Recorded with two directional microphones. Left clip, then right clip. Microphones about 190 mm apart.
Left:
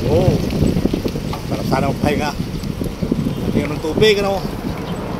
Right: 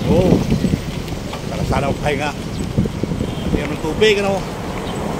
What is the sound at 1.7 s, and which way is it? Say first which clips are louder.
Speech: left 1 dB; 15° left (ahead or behind).